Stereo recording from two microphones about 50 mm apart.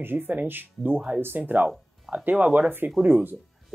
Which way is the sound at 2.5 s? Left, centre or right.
Right.